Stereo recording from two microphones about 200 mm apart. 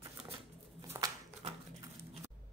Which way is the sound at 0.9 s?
15° right (ahead or behind).